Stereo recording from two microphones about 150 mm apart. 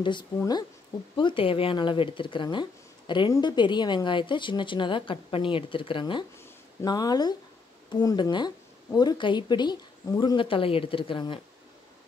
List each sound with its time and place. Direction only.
0.0 s speech: 30° left (ahead or behind)